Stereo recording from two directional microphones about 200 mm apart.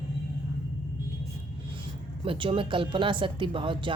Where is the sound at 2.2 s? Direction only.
25° right (ahead or behind).